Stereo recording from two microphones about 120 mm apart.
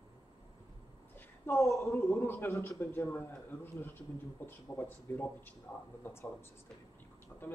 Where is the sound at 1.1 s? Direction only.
15° left (ahead or behind).